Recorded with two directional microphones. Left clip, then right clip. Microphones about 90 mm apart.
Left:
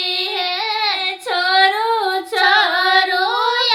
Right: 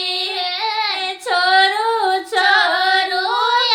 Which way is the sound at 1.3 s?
15° right (ahead or behind).